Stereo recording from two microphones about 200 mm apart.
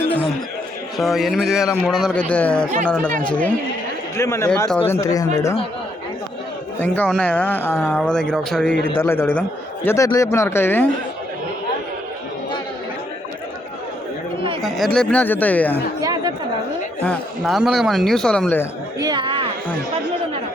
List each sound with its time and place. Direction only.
0.9 s speech: centre (ahead or behind); by 5.3 s 15° left (ahead or behind)
6.7 s speech: 10° left (ahead or behind)
14.6 s speech: centre (ahead or behind)
16.0 s chatter: 20° right (ahead or behind)
17.0 s speech: 5° left (ahead or behind)
18.9 s a sound: 20° right (ahead or behind)